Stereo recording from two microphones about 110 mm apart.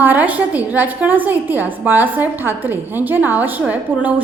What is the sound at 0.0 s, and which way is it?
A woman's voice, 15° right (ahead or behind).